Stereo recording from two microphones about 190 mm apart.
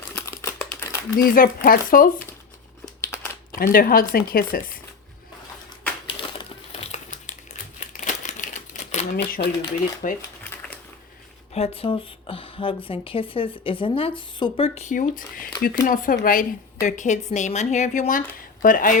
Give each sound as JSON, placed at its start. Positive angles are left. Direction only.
{"t": 0.2, "sound": "typing", "side_deg": 10}
{"t": 1.1, "sound": "speech", "side_deg": 50}
{"t": 3.5, "sound": "speech", "side_deg": 50}
{"t": 6.7, "sound": "crumpling", "side_deg": 40}
{"t": 9.1, "sound": "speech", "side_deg": 60}
{"t": 9.6, "sound": "speech", "side_deg": 40}
{"t": 11.5, "sound": "speech", "side_deg": 30}